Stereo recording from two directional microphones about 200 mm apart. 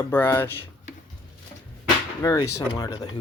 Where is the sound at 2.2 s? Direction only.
15° left (ahead or behind).